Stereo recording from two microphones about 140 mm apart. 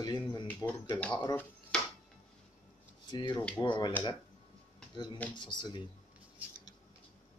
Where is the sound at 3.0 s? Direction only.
30° left (ahead or behind).